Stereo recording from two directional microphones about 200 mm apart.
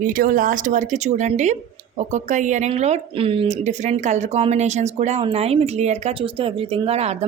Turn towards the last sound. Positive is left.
turn(degrees=-30)  # may be behind; listen again after turning